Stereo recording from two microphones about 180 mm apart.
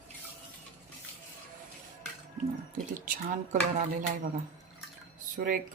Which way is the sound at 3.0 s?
45° right (ahead or behind).